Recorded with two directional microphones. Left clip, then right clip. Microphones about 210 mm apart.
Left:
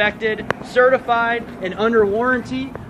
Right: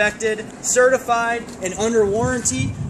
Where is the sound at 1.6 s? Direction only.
30° right (ahead or behind).